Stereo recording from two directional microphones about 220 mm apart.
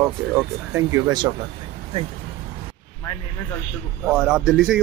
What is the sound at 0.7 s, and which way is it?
Speech, 15° right (ahead or behind).